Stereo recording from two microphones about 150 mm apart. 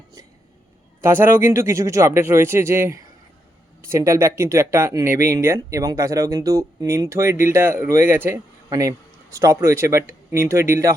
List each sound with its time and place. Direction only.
1.0 s a man's voice: 15° right (ahead or behind)